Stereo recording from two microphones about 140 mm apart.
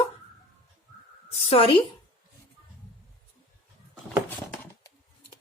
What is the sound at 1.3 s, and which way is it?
Speech, 40° left (ahead or behind).